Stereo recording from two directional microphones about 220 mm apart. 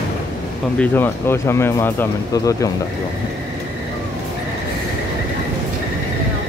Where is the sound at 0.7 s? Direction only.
10° left (ahead or behind).